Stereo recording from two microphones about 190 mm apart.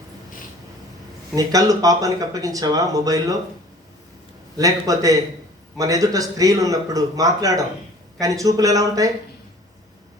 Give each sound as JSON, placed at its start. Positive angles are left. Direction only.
{"t": 1.4, "sound": "speech", "side_deg": -20}
{"t": 4.5, "sound": "speech", "side_deg": -20}